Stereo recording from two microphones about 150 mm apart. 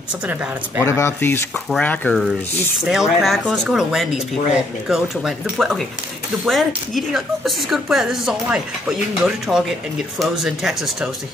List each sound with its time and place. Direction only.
0.3 s speech: 10° right (ahead or behind)
0.8 s speech: 15° left (ahead or behind)
2.8 s speech: 5° right (ahead or behind)